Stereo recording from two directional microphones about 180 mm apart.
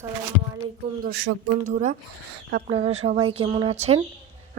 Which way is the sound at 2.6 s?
35° right (ahead or behind).